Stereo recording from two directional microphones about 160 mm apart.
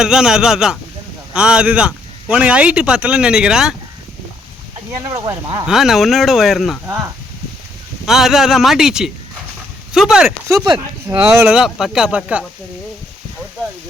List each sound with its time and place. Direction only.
0.0 s speech: 5° right (ahead or behind)
4.9 s speech: 20° right (ahead or behind)
5.6 s speech: centre (ahead or behind)
8.0 s speech: centre (ahead or behind)
10.5 s speech: 20° right (ahead or behind)
11.3 s speech: 5° right (ahead or behind)